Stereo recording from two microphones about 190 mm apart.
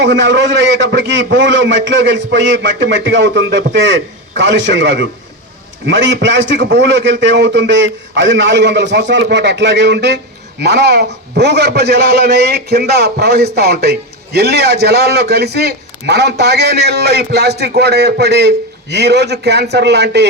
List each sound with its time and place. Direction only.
0.0 s a man's voice: 65° right (ahead or behind)